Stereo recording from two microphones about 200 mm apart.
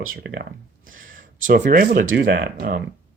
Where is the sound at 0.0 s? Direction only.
75° right (ahead or behind); by 0.4 s 60° right (ahead or behind).